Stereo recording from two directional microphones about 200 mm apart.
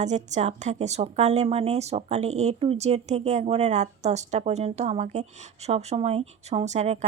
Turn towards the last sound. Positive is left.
turn(degrees=-35)  # may be behind; listen again after turning